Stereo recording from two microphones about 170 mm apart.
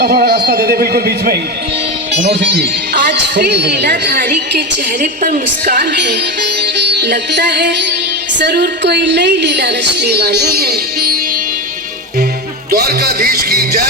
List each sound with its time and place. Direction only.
0.0 s a man's voice: 75° right (ahead or behind)
2.3 s speech: 85° right
4.9 s a woman's voice: 50° right (ahead or behind)
5.6 s a woman's voice: 80° right
12.7 s music: 65° right (ahead or behind)